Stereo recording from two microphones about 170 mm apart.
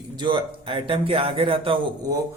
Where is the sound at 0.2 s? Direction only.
30° right (ahead or behind).